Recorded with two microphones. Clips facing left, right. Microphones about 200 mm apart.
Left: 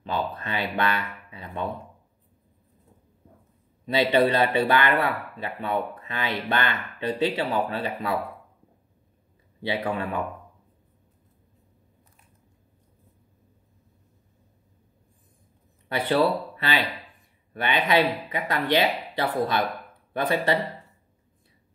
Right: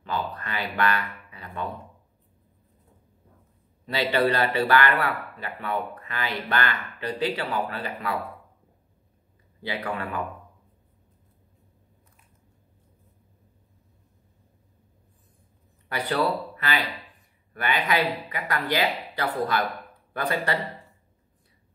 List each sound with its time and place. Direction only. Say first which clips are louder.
0.0 s a man's voice: left 2 dB; 25° left (ahead or behind)
3.8 s a man's voice: left 3 dB; 20° left (ahead or behind)
9.6 s a man's voice: left 4 dB; 25° left (ahead or behind)
15.9 s a man's voice: left 3 dB; 25° left (ahead or behind)